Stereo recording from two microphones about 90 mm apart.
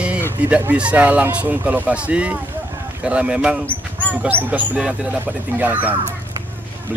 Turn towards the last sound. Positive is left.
turn(degrees=-20)  # may be behind; listen again after turning